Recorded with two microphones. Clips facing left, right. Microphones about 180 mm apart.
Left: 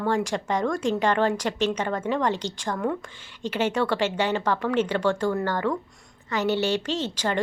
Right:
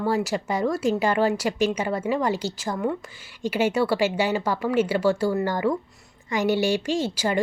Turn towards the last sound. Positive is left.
turn(degrees=-10)  # may be behind; listen again after turning